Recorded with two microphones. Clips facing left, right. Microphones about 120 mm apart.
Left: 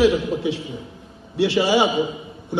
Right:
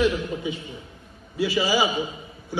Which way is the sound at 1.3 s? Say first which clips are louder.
Left 5 dB; 70° left (ahead or behind).